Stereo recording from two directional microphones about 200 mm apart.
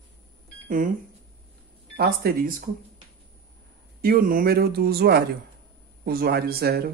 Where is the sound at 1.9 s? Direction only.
50° right (ahead or behind).